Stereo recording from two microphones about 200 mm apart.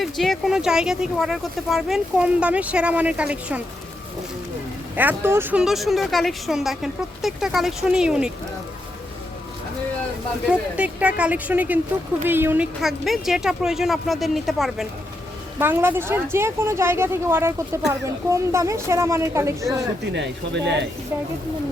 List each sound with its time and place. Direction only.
0.0 s speech: centre (ahead or behind)
4.9 s speech: 10° right (ahead or behind)
10.8 s speech: 5° right (ahead or behind)
15.5 s speech: 10° right (ahead or behind)
20.1 s speech: 60° right (ahead or behind)